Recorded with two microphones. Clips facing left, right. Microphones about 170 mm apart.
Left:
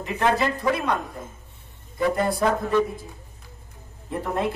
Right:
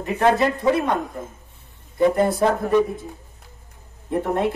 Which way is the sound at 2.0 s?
20° right (ahead or behind).